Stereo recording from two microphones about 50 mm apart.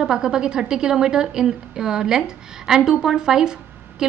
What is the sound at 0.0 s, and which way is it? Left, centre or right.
A woman's voice, centre.